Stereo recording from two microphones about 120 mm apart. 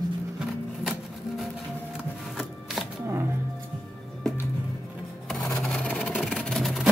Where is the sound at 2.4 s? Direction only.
Centre (ahead or behind).